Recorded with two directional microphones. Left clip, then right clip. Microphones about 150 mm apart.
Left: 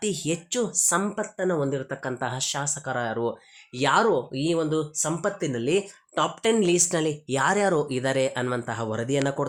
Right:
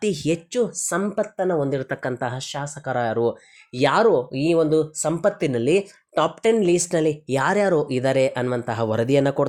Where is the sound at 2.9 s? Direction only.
30° right (ahead or behind).